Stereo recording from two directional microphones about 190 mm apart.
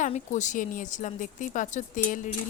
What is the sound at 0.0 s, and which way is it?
A woman's voice, 40° left (ahead or behind).